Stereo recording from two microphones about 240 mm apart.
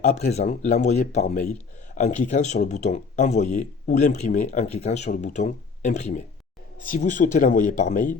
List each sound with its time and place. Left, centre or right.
0.0 s speech: left